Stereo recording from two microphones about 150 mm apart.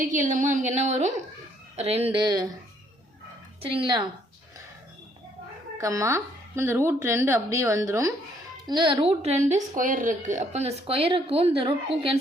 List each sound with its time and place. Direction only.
0.1 s a woman's voice: 55° right (ahead or behind)
2.1 s speech: 30° right (ahead or behind)
3.6 s a woman's voice: 35° right (ahead or behind)
5.7 s speech: 20° right (ahead or behind)
8.6 s a woman's voice: 30° right (ahead or behind)